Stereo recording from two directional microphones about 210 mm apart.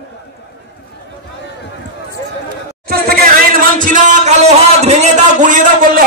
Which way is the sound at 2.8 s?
45° right (ahead or behind).